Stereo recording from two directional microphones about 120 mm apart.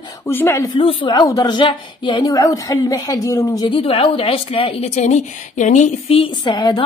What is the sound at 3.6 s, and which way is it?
Speech, 50° left (ahead or behind).